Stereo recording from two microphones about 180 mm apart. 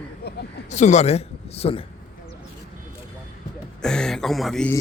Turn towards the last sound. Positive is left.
turn(degrees=0)  # may be behind; listen again after turning